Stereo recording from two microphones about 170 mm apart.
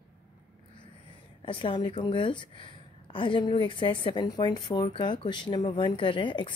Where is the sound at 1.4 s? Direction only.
30° left (ahead or behind).